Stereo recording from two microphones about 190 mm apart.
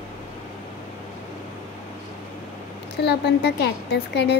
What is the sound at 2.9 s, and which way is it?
Speech, 60° left (ahead or behind).